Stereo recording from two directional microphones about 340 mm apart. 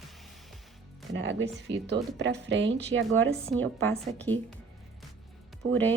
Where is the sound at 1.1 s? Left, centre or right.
Right.